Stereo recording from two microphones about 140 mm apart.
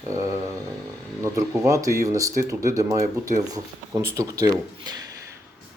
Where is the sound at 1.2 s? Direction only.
20° right (ahead or behind).